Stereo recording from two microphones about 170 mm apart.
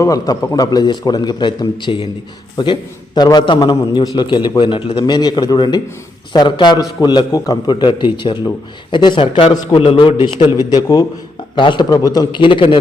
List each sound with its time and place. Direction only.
0.0 s a man's voice: 20° left (ahead or behind)